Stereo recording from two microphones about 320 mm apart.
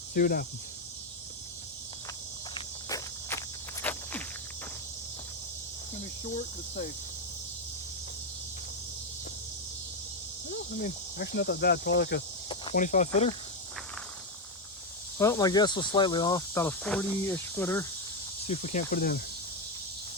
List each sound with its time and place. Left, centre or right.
0.1 s speech: left
2.6 s walk: centre
10.8 s cricket: left
12.5 s speech: centre
15.2 s speech: centre
18.4 s speech: centre